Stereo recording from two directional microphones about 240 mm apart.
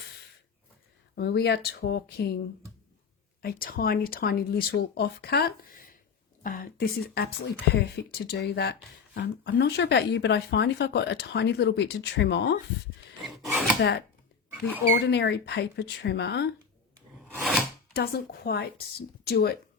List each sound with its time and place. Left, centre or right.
1.1 s speech: left
3.4 s speech: left
13.2 s wood: centre
13.7 s speech: left
17.9 s speech: left